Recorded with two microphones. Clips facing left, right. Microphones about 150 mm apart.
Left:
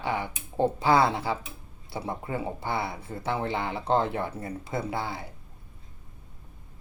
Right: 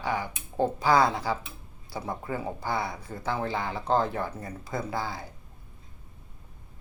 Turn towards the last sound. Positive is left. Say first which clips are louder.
# left 1 dB
turn(degrees=25)  # may be behind; listen again after turning